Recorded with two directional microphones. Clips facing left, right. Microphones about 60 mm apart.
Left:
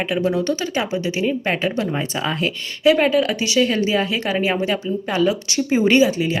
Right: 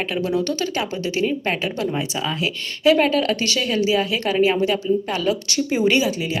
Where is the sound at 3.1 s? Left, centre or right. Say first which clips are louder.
Left 2 dB; centre.